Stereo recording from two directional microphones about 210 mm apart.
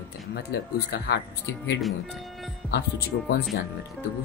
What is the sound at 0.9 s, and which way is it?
Speech, 55° left (ahead or behind).